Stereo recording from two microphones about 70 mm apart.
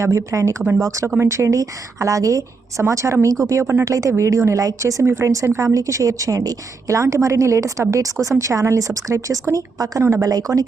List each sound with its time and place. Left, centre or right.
0.0 s a woman's voice: right
5.0 s a woman's voice: right